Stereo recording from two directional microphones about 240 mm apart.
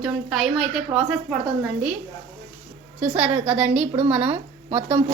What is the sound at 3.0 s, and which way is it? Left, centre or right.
A woman's voice, centre.